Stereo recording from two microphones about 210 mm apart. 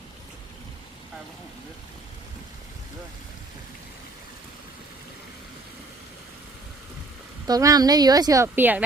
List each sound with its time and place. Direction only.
7.4 s speech: 15° right (ahead or behind)